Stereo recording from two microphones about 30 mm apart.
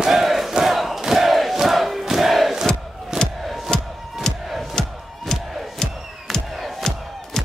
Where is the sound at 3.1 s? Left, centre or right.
Centre.